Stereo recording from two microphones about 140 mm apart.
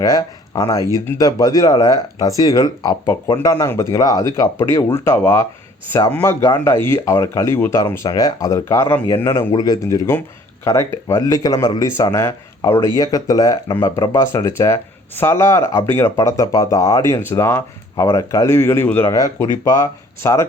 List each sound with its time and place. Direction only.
0.0 s a man's voice: 25° left (ahead or behind)
9.5 s speech: 30° left (ahead or behind)